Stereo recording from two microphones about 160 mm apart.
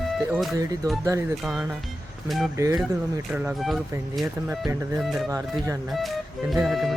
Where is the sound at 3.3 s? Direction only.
5° right (ahead or behind).